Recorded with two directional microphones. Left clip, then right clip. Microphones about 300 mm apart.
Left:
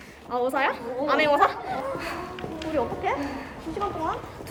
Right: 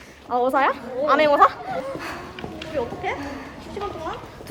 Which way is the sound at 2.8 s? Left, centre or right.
Left.